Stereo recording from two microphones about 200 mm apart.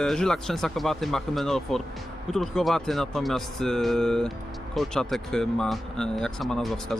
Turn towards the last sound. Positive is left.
turn(degrees=5)  # may be behind; listen again after turning